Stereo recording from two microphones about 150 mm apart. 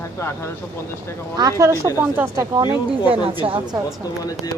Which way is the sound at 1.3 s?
25° right (ahead or behind).